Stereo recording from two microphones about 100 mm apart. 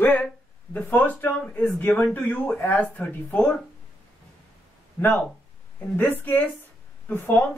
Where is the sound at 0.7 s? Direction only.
15° left (ahead or behind).